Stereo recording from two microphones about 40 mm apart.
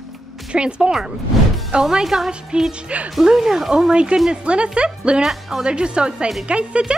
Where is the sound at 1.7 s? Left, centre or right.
Centre.